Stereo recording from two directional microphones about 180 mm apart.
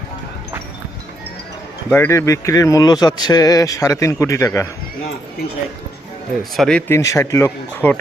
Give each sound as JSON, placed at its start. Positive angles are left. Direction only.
{"t": 1.9, "sound": "speech", "side_deg": 15}
{"t": 6.6, "sound": "speech", "side_deg": 5}